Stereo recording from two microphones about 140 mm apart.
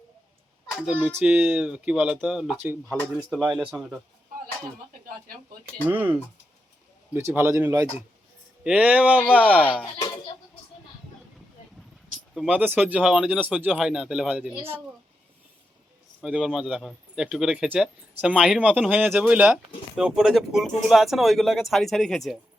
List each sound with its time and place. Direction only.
0.8 s speech: 5° right (ahead or behind)
3.0 s speech: 10° left (ahead or behind)
3.5 s speech: 5° right (ahead or behind)
5.9 s speech: 10° right (ahead or behind)
8.6 s speech: 10° right (ahead or behind)
9.5 s speech: 10° left (ahead or behind)
12.3 s speech: 5° right (ahead or behind)
16.2 s speech: 5° right (ahead or behind)